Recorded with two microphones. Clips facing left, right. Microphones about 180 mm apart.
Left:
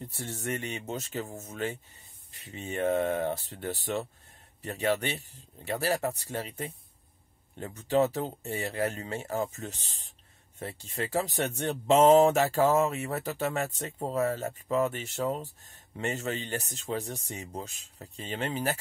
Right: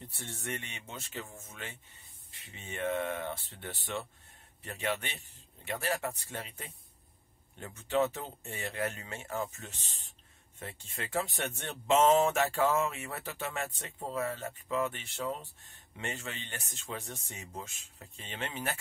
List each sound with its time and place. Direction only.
0.0 s speech: 40° left (ahead or behind)